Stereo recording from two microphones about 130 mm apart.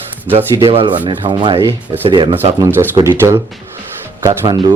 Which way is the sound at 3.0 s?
20° right (ahead or behind).